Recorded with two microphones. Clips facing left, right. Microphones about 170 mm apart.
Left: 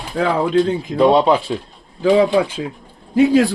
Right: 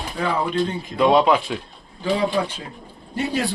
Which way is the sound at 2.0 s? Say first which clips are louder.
Left 8 dB; 90° left.